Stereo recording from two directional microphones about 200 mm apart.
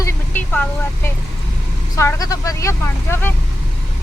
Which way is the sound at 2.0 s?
15° left (ahead or behind).